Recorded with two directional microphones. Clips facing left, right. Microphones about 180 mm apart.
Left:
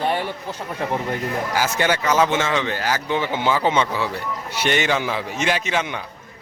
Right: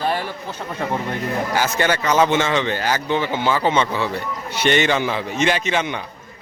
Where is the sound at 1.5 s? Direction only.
10° left (ahead or behind).